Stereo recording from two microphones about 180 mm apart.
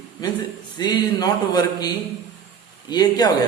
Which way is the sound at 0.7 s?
25° left (ahead or behind).